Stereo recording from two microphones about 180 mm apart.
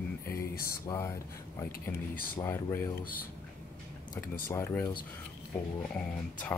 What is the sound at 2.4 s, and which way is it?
Speech, 15° left (ahead or behind).